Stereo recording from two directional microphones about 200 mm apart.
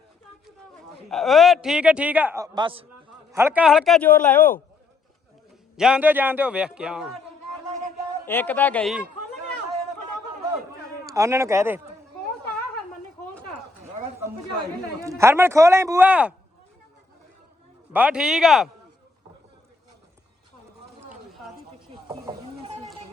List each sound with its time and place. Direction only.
1.1 s a man's voice: centre (ahead or behind); by 2.8 s 25° right (ahead or behind)
3.3 s a man's voice: 10° right (ahead or behind); by 4.5 s 10° left (ahead or behind)
5.7 s a man's voice: 5° right (ahead or behind)
8.3 s speech: 10° left (ahead or behind)
11.0 s speech: 15° right (ahead or behind)
15.0 s speech: 15° right (ahead or behind)
17.9 s a man's voice: 5° right (ahead or behind)
22.0 s a sound: 20° right (ahead or behind)